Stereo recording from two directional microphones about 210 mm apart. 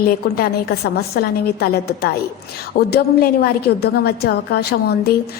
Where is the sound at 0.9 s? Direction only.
50° left (ahead or behind).